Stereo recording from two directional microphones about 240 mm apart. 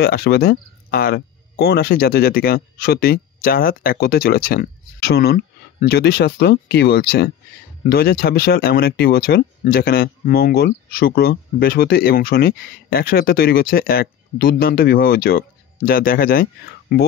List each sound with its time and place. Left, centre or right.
0.0 s speech: left